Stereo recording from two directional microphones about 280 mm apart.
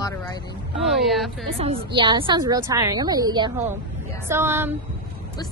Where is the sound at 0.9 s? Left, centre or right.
Centre.